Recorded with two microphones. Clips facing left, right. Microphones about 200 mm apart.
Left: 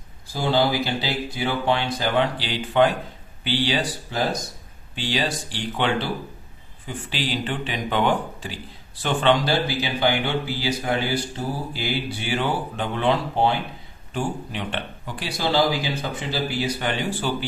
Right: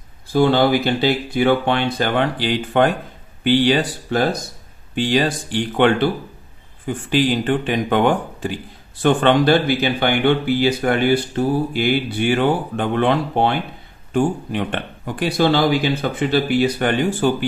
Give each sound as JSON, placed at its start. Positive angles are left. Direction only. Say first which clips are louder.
{"t": 0.3, "sound": "speech", "louder": "right 7 dB", "side_deg": -60}
{"t": 14.1, "sound": "speech", "louder": "right 9 dB", "side_deg": -50}